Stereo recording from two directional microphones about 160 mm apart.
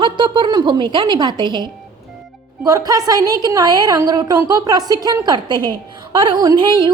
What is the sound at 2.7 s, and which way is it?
A woman's voice, 20° right (ahead or behind).